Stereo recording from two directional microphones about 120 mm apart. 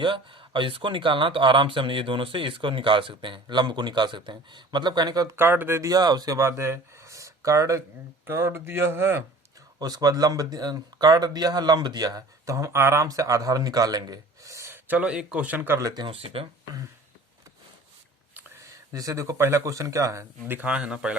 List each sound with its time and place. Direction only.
0.0 s speech: 45° right (ahead or behind)
5.4 s speech: 20° right (ahead or behind)
9.7 s speech: 35° right (ahead or behind)
16.0 s speech: 55° right (ahead or behind)
18.7 s speech: 30° right (ahead or behind); by 21.2 s 10° right (ahead or behind)